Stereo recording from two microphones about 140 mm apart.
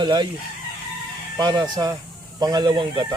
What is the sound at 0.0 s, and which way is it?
Chicken, 30° right (ahead or behind).